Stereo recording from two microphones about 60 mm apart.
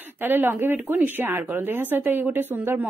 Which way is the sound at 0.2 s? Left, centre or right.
Right.